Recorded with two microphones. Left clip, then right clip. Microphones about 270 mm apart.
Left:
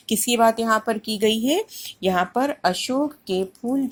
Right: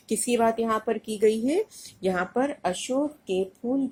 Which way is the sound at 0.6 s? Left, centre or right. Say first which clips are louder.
Left 5 dB; left.